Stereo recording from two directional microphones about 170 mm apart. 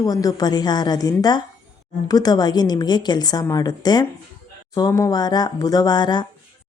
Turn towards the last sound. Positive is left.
turn(degrees=25)  # may be behind; listen again after turning